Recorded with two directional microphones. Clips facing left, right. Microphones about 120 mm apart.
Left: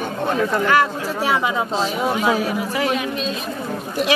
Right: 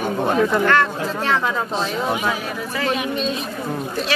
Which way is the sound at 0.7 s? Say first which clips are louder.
Left 1 dB; 10° left (ahead or behind).